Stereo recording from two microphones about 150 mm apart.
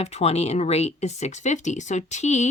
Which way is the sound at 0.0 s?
45° left (ahead or behind).